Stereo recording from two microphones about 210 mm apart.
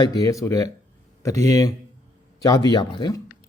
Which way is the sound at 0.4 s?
15° left (ahead or behind).